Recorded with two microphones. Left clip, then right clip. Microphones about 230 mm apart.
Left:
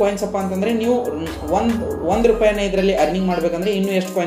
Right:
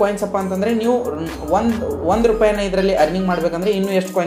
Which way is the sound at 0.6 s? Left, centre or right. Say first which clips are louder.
Right 1 dB; centre.